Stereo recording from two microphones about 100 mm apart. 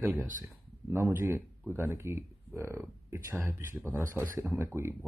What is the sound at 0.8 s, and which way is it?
Speech, 25° right (ahead or behind).